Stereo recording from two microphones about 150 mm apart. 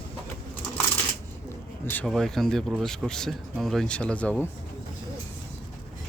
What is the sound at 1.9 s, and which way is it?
A man's voice, 5° left (ahead or behind).